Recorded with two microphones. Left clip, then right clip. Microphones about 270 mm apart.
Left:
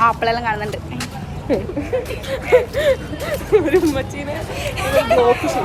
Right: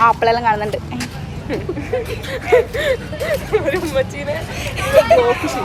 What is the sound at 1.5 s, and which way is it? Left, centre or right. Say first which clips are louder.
Speech: left 5 dB; left.